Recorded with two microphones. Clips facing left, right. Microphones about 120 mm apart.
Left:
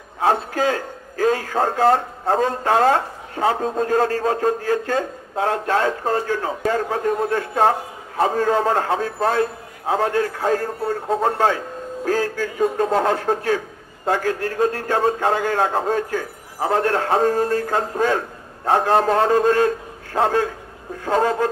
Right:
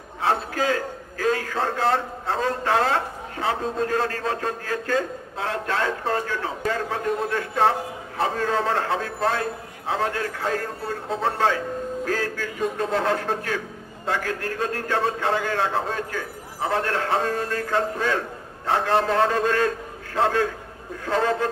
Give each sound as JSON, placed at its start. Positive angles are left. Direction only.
{"t": 0.2, "sound": "a man's voice", "side_deg": 35}